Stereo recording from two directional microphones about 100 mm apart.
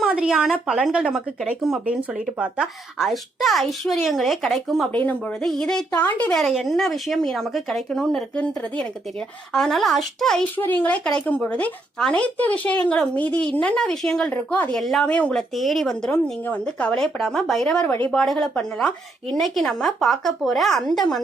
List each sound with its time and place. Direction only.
0.1 s speech: 10° right (ahead or behind)
4.9 s speech: 15° left (ahead or behind)
6.5 s speech: centre (ahead or behind)
10.4 s speech: 20° left (ahead or behind)
14.8 s speech: 5° left (ahead or behind)
15.0 s speech: 15° left (ahead or behind)
17.8 s speech: 15° left (ahead or behind)